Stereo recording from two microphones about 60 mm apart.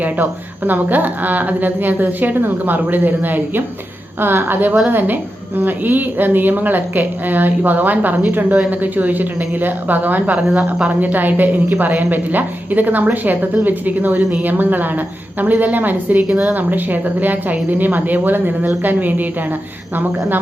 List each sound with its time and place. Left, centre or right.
0.0 s a woman's voice: right